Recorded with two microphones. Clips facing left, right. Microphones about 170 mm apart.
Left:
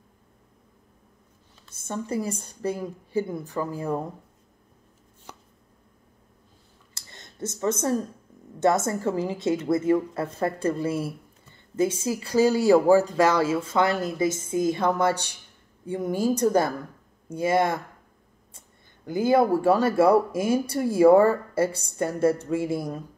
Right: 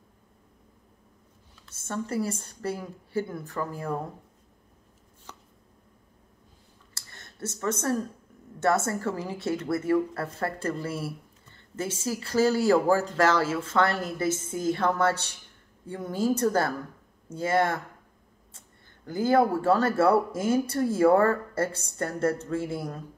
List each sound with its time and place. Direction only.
1.7 s speech: 15° left (ahead or behind)
6.9 s a sound: 20° left (ahead or behind)
8.5 s speech: 15° left (ahead or behind)
19.0 s speech: 15° left (ahead or behind)